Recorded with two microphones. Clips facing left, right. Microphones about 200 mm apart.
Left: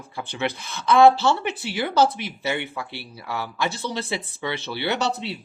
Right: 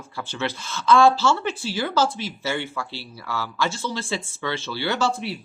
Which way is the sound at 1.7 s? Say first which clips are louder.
Left 3 dB; 20° left (ahead or behind).